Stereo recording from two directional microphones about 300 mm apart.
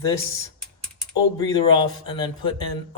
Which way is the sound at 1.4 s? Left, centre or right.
Centre.